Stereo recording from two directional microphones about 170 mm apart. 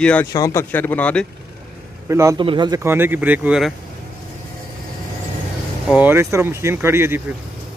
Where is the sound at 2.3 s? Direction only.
30° right (ahead or behind).